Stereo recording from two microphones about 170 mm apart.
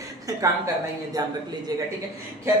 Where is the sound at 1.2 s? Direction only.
20° right (ahead or behind).